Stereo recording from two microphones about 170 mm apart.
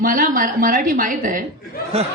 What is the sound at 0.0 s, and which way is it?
A woman's voice, 55° right (ahead or behind).